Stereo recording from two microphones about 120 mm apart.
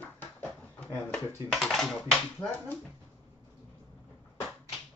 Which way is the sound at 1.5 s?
Centre (ahead or behind).